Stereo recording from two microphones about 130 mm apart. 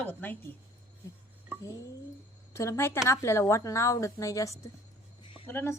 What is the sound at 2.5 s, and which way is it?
A woman's voice, 20° left (ahead or behind).